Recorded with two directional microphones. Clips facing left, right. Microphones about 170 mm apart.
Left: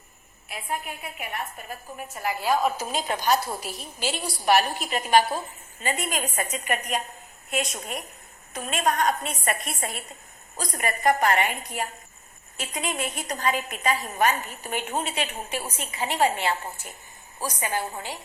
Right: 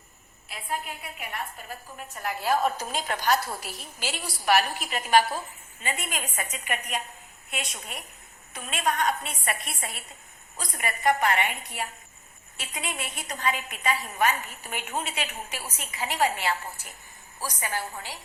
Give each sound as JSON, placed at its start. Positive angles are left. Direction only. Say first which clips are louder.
{"t": 0.4, "sound": "a woman's voice", "louder": "left 1 dB", "side_deg": 20}
{"t": 2.1, "sound": "a woman's voice", "louder": "left 2 dB", "side_deg": 5}
{"t": 2.8, "sound": "a woman's voice", "louder": "left 2 dB", "side_deg": 15}
{"t": 4.1, "sound": "a woman's voice", "louder": "left 2 dB", "side_deg": 25}
{"t": 5.8, "sound": "a woman's voice", "louder": "left 5 dB", "side_deg": 35}